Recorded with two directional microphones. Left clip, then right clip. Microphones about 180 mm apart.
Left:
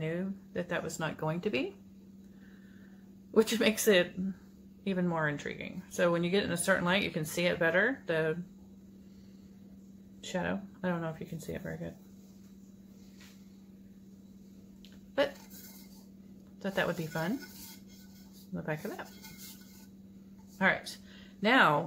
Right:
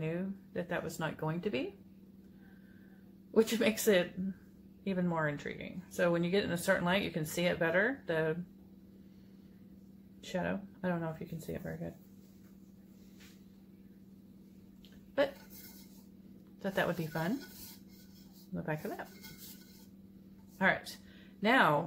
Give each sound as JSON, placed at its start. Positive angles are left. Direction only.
{"t": 0.0, "sound": "speech", "side_deg": 5}
{"t": 3.3, "sound": "speech", "side_deg": 15}
{"t": 10.2, "sound": "speech", "side_deg": 5}
{"t": 16.6, "sound": "speech", "side_deg": 0}
{"t": 18.5, "sound": "speech", "side_deg": 0}
{"t": 20.5, "sound": "speech", "side_deg": 0}